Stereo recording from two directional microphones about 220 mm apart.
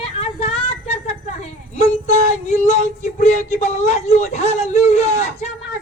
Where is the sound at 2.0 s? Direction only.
30° left (ahead or behind).